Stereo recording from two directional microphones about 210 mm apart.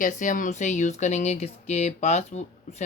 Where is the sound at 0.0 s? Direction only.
40° left (ahead or behind).